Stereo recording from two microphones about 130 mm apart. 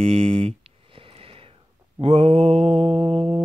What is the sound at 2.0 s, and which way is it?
Speech, 50° right (ahead or behind).